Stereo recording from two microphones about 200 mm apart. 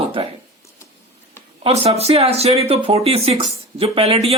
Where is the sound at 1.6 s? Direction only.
30° right (ahead or behind).